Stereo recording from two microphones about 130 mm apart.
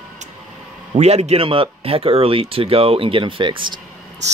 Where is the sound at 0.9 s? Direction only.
55° right (ahead or behind); by 3.7 s 40° right (ahead or behind).